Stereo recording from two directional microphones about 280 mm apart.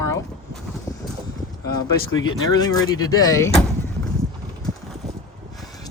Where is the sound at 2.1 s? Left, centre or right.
Left.